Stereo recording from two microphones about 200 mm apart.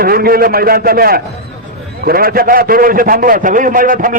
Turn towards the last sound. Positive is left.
turn(degrees=-45)  # may be behind; listen again after turning